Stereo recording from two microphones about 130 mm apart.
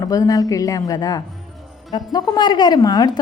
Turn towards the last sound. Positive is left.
turn(degrees=30)  # may be behind; listen again after turning